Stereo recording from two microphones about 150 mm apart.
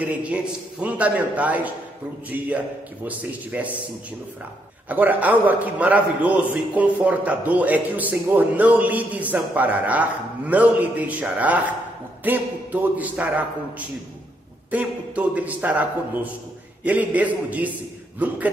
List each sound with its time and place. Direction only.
0.0 s a man's voice: 10° right (ahead or behind)
4.8 s a man's voice: 10° right (ahead or behind)